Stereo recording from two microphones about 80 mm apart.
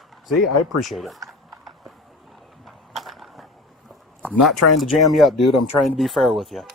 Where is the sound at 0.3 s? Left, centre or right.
Centre.